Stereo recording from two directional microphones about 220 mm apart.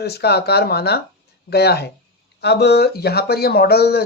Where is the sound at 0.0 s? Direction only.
45° left (ahead or behind).